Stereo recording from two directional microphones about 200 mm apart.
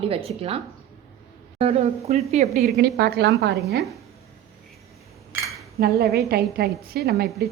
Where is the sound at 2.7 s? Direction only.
55° right (ahead or behind).